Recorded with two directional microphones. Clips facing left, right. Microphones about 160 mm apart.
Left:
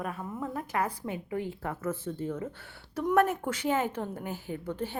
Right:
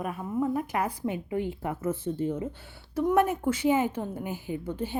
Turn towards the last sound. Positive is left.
turn(degrees=-15)  # may be behind; listen again after turning